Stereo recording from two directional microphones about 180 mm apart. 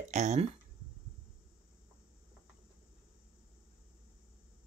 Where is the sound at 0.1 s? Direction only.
40° right (ahead or behind).